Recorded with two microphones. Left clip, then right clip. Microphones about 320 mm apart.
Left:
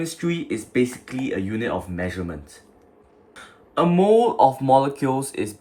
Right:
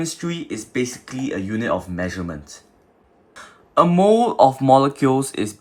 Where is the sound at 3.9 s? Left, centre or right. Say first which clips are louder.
Left 1 dB; right.